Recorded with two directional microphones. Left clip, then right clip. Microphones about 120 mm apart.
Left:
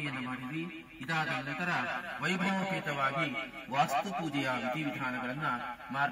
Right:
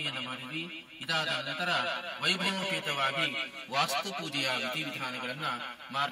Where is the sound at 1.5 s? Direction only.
20° right (ahead or behind).